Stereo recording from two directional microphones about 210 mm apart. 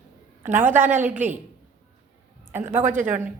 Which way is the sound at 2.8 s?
40° right (ahead or behind).